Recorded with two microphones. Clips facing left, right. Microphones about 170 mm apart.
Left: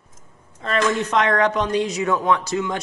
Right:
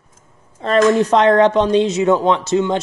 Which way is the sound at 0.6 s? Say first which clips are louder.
Right 8 dB; 35° right (ahead or behind).